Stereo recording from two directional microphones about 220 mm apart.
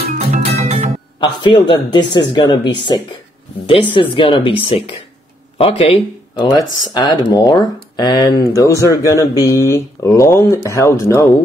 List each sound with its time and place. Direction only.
0.2 s music: 30° right (ahead or behind)
1.2 s speech: 20° left (ahead or behind)
3.9 s speech: 25° left (ahead or behind)